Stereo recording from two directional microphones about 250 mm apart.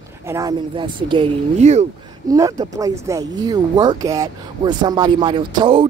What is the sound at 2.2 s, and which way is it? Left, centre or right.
Speech, centre.